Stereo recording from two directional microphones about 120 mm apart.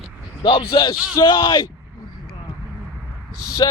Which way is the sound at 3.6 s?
35° left (ahead or behind).